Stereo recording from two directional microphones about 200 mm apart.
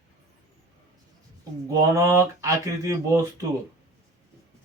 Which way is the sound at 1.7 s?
15° right (ahead or behind).